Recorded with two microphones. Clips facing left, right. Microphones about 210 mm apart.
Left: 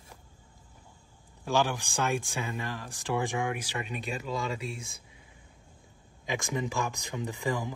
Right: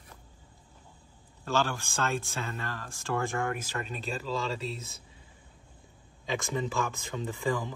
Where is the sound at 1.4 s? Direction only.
15° left (ahead or behind).